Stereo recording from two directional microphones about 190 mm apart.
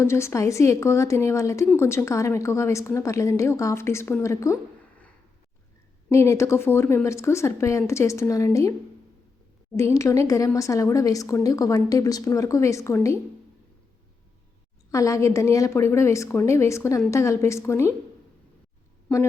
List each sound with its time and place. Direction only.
0.0 s a woman's voice: 15° left (ahead or behind)
6.1 s a woman's voice: 15° left (ahead or behind)
9.7 s a woman's voice: 15° left (ahead or behind)
14.8 s a woman's voice: 15° left (ahead or behind)
19.0 s speech: 15° left (ahead or behind)